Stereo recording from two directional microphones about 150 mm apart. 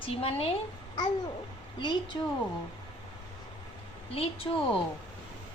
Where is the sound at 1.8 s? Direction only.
30° left (ahead or behind).